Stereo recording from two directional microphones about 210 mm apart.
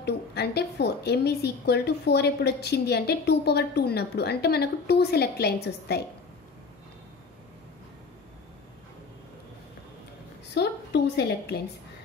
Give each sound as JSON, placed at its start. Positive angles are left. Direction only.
{"t": 0.0, "sound": "a woman's voice", "side_deg": 50}
{"t": 10.5, "sound": "a woman's voice", "side_deg": 50}